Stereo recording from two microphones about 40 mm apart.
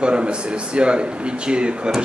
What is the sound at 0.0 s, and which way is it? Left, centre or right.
A man's voice, right.